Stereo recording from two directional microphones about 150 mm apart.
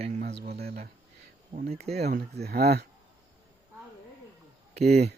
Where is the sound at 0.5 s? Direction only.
90° right.